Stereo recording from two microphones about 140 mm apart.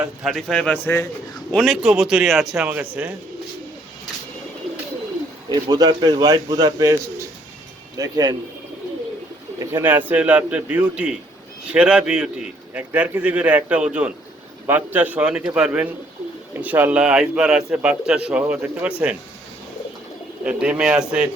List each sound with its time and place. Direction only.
0.2 s a man's voice: centre (ahead or behind)
5.5 s speech: 30° right (ahead or behind)
9.6 s a man's voice: 20° right (ahead or behind)
20.4 s a man's voice: 5° right (ahead or behind)